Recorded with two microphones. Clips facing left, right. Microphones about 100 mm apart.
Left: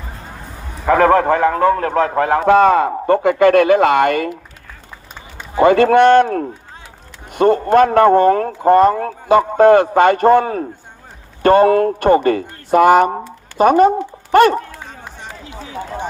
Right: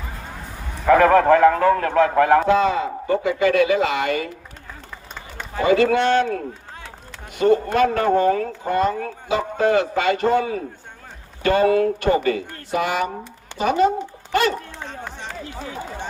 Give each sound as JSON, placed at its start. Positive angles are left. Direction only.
{"t": 0.3, "sound": "bow-wow", "side_deg": 5}
{"t": 0.9, "sound": "a man's voice", "side_deg": 30}
{"t": 2.5, "sound": "a man's voice", "side_deg": 55}
{"t": 5.6, "sound": "a man's voice", "side_deg": 55}
{"t": 14.8, "sound": "run", "side_deg": 10}